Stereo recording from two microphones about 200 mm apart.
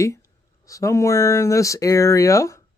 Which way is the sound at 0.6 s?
15° left (ahead or behind).